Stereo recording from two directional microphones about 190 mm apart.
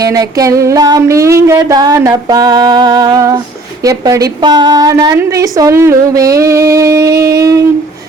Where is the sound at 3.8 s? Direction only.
20° right (ahead or behind).